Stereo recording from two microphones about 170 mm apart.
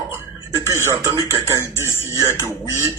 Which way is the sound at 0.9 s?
20° right (ahead or behind).